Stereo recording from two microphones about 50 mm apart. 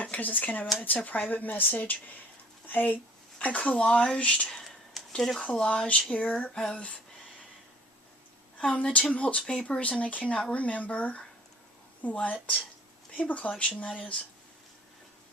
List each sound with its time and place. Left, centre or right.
0.0 s speech: left
3.8 s speech: centre
4.4 s a sound: centre
5.1 s speech: centre
5.4 s speech: centre
8.6 s speech: left